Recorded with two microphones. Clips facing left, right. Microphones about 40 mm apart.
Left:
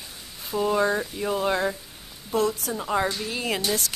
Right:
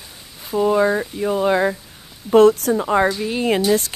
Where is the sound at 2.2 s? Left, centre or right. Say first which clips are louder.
Right 13 dB; right.